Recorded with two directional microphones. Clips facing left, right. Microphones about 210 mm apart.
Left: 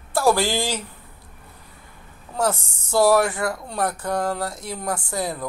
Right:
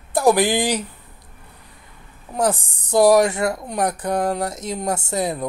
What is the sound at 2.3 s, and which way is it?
A woman's voice, 15° right (ahead or behind).